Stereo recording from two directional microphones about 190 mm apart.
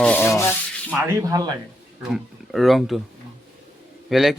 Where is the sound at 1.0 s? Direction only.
20° right (ahead or behind).